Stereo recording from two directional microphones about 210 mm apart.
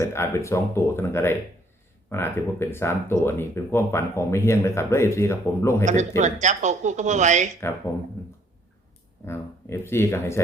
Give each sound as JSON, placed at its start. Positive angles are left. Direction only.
{"t": 0.0, "sound": "speech", "side_deg": 15}
{"t": 5.8, "sound": "speech", "side_deg": -35}
{"t": 9.2, "sound": "speech", "side_deg": 10}